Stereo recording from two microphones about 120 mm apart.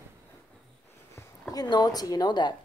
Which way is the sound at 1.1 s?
30° left (ahead or behind).